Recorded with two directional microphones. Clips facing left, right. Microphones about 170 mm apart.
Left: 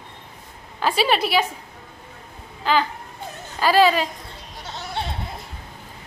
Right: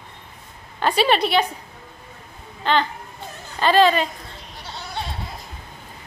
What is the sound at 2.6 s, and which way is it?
A woman's voice, 5° left (ahead or behind).